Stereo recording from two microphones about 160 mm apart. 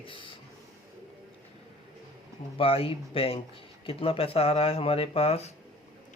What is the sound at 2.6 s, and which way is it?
Speech, 35° left (ahead or behind).